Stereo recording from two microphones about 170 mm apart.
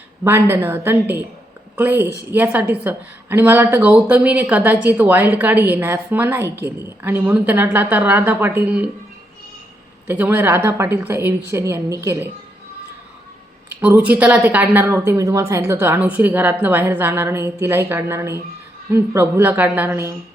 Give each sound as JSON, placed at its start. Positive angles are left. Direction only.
{"t": 0.3, "sound": "a woman's voice", "side_deg": -15}
{"t": 10.1, "sound": "a woman's voice", "side_deg": -10}
{"t": 13.8, "sound": "a woman's voice", "side_deg": -10}